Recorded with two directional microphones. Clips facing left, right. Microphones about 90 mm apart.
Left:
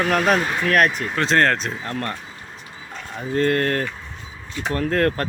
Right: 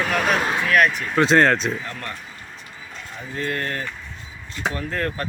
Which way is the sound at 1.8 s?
45° left (ahead or behind).